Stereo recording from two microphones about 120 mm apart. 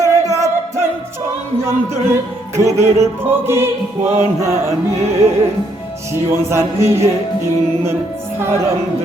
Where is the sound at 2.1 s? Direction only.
25° right (ahead or behind).